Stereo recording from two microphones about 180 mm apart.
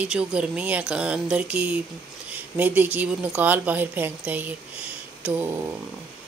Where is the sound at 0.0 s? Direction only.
5° right (ahead or behind).